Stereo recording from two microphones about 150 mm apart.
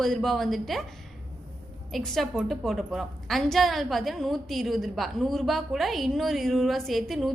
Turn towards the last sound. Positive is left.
turn(degrees=0)  # may be behind; listen again after turning